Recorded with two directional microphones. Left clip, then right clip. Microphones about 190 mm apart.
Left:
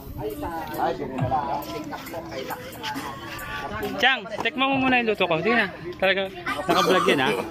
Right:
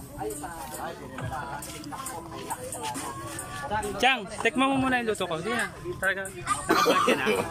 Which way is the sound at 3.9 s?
10° right (ahead or behind).